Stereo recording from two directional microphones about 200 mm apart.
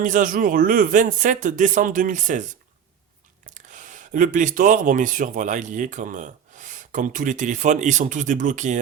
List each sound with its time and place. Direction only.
0.0 s speech: 40° right (ahead or behind)
3.4 s speech: 40° right (ahead or behind)